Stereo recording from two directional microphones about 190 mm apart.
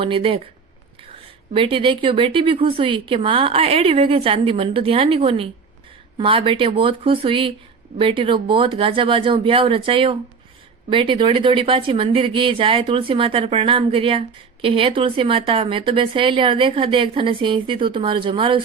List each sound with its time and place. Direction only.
0.0 s speech: 30° right (ahead or behind)
1.5 s speech: 25° right (ahead or behind)